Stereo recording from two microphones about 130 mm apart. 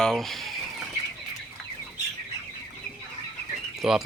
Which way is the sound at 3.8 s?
Centre (ahead or behind).